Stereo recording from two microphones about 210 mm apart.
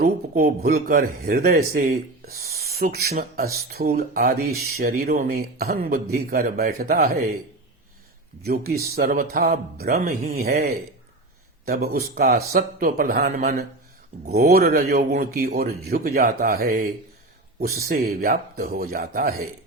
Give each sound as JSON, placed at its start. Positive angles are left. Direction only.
{"t": 0.0, "sound": "speech", "side_deg": -45}
{"t": 8.4, "sound": "speech", "side_deg": -45}